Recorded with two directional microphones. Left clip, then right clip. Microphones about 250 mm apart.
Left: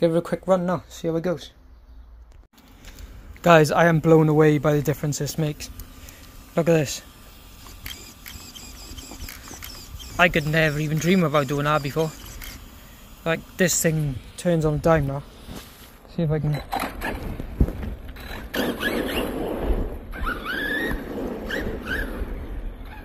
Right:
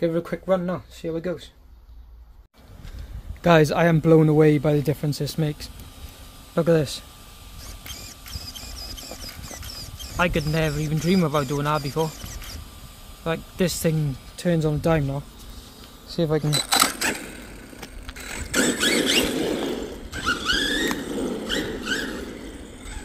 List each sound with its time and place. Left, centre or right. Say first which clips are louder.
0.0 s speech: left 3 dB; centre
3.4 s speech: left 2 dB; centre
10.1 s speech: left 4 dB; centre
13.2 s speech: left 3 dB; centre
16.2 s a sound: right 5 dB; centre; by 22.2 s right